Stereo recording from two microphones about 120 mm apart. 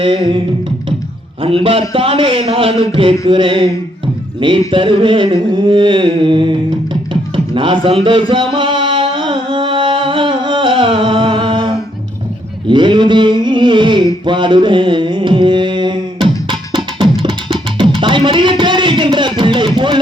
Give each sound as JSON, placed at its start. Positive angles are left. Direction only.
{"t": 0.0, "sound": "a man's voice", "side_deg": -45}
{"t": 7.1, "sound": "music", "side_deg": -45}
{"t": 12.6, "sound": "a sound", "side_deg": -40}
{"t": 14.3, "sound": "carnatic music", "side_deg": -40}
{"t": 17.0, "sound": "music", "side_deg": -50}